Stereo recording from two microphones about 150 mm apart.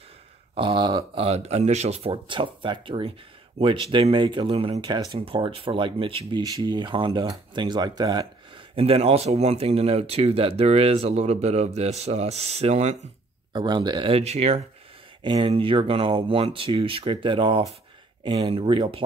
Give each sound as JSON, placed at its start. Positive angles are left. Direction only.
{"t": 0.6, "sound": "speech", "side_deg": -30}
{"t": 6.4, "sound": "speech", "side_deg": -25}
{"t": 8.7, "sound": "speech", "side_deg": -40}
{"t": 13.5, "sound": "speech", "side_deg": -30}
{"t": 15.2, "sound": "speech", "side_deg": -35}